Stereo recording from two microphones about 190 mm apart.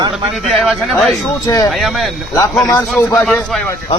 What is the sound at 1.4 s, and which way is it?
Speech, 15° left (ahead or behind).